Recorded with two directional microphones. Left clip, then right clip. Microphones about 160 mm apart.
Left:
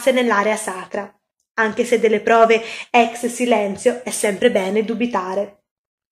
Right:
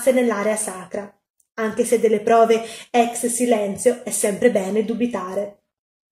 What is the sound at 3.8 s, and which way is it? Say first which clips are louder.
Speech: left 1 dB; 25° right (ahead or behind).